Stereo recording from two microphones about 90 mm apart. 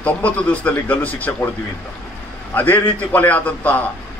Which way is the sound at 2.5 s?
20° left (ahead or behind).